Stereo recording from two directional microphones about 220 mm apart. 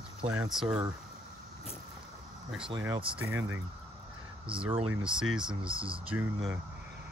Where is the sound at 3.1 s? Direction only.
10° right (ahead or behind).